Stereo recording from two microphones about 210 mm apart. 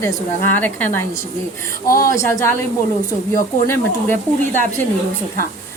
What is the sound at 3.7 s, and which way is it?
Speech, 10° left (ahead or behind).